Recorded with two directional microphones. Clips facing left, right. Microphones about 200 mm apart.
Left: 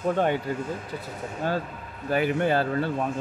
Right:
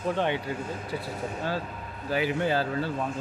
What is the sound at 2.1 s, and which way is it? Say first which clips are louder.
Speech: left 3 dB; 55° left (ahead or behind).